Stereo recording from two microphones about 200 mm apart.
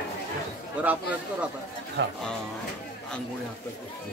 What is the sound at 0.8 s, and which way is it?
Speech, 5° right (ahead or behind).